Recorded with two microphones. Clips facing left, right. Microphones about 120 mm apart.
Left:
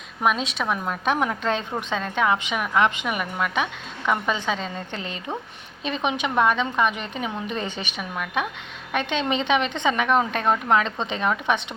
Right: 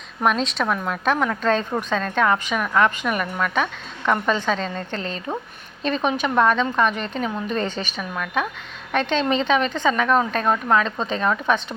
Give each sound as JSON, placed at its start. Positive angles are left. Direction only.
{"t": 0.2, "sound": "a woman's voice", "side_deg": 5}